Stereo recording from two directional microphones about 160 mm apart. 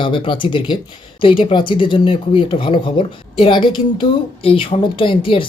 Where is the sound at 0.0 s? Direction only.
30° left (ahead or behind).